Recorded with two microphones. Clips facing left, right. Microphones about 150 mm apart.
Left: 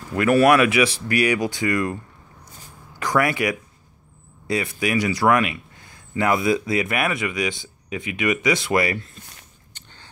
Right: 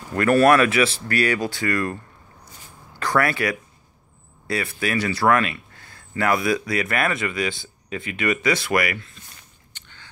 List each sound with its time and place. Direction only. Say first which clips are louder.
0.1 s speech: even; 10° left (ahead or behind)
3.0 s speech: left 1 dB; 15° left (ahead or behind); by 9.1 s 30° left (ahead or behind)
9.8 s a sound: even; 40° left (ahead or behind)